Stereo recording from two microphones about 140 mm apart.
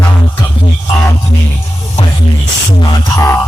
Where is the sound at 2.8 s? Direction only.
20° left (ahead or behind).